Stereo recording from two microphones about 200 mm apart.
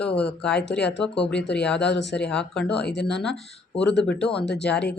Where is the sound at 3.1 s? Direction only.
Centre (ahead or behind).